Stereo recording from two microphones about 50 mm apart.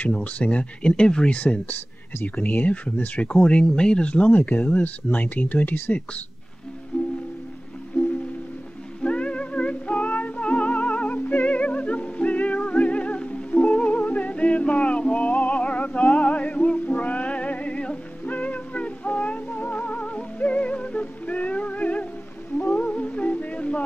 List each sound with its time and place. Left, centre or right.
0.1 s speech: left
6.9 s music: centre
9.0 s music: left